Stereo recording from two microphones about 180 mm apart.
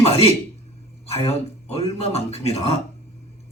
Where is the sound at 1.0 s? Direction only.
35° left (ahead or behind).